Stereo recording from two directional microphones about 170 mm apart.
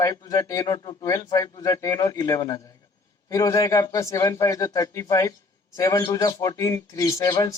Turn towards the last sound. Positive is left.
turn(degrees=20)  # may be behind; listen again after turning